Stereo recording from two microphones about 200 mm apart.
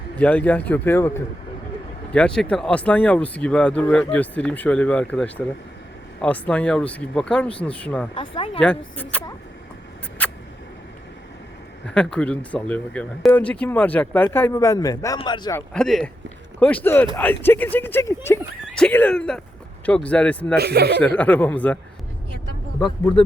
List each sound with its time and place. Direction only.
0.2 s speech: 10° left (ahead or behind)
8.1 s speech: 25° left (ahead or behind)
8.5 s speech: 5° left (ahead or behind)
10.2 s mouse: 5° left (ahead or behind)
11.9 s speech: 5° left (ahead or behind); by 15.6 s 20° left (ahead or behind)
15.7 s speech: 5° left (ahead or behind)
20.6 s speech: 55° right (ahead or behind)
21.0 s speech: 5° left (ahead or behind)